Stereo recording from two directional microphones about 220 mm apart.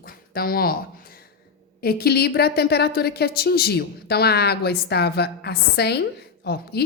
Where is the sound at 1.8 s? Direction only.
45° left (ahead or behind).